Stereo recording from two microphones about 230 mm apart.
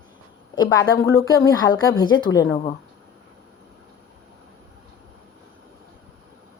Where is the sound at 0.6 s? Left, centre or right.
Centre.